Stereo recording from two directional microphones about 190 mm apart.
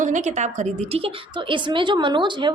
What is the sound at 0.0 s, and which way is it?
A woman's voice, 40° right (ahead or behind).